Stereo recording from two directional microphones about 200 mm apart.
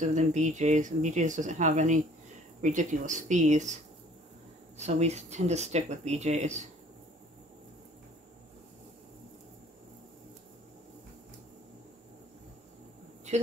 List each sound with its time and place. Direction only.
0.0 s speech: 35° right (ahead or behind)
4.7 s speech: 35° right (ahead or behind)
13.3 s speech: 35° right (ahead or behind)